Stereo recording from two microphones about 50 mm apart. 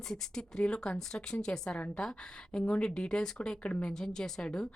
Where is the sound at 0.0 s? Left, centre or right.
Centre.